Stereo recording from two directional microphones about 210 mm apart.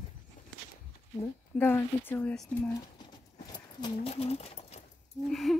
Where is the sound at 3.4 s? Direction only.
20° left (ahead or behind).